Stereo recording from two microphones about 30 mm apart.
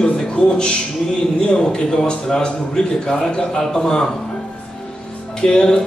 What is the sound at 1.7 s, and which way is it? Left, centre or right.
A man's voice, left.